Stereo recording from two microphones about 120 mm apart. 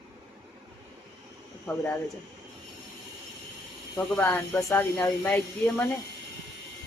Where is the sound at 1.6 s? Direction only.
15° left (ahead or behind).